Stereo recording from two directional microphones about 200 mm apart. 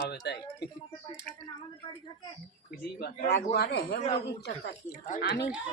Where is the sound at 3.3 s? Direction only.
55° left (ahead or behind).